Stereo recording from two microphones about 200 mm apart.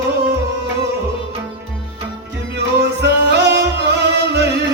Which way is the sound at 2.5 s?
60° right (ahead or behind).